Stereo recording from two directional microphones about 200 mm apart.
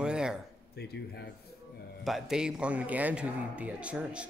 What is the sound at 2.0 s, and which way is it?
A man's voice, centre (ahead or behind).